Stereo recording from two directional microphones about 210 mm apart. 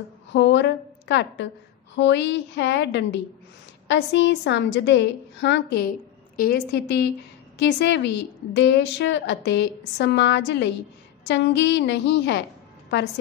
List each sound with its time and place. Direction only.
0.3 s a woman's voice: 60° left (ahead or behind)